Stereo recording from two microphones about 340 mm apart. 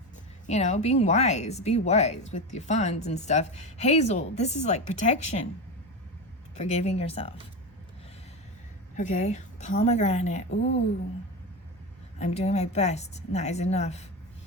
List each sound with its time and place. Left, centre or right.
0.4 s speech: centre
6.6 s speech: centre
9.0 s speech: left
12.2 s speech: centre